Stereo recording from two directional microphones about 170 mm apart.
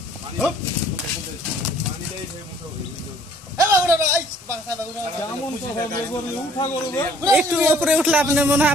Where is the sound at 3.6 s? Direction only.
15° right (ahead or behind).